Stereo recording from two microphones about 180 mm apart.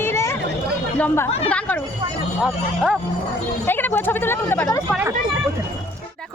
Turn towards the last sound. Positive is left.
turn(degrees=10)  # may be behind; listen again after turning